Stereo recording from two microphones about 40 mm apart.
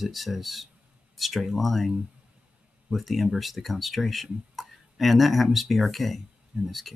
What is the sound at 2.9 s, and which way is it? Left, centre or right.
Speech, centre.